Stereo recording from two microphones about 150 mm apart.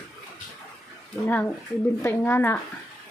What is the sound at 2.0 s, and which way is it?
Speech, 15° left (ahead or behind).